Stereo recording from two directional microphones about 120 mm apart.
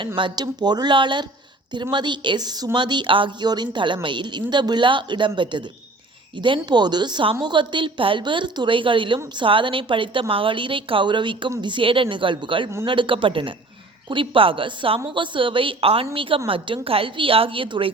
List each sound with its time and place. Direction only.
0.2 s a woman's voice: 40° right (ahead or behind)